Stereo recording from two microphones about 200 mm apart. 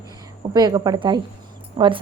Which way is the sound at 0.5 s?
20° right (ahead or behind).